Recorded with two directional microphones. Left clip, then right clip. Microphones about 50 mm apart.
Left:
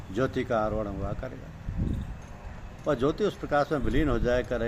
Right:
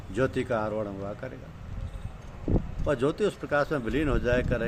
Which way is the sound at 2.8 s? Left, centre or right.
Right.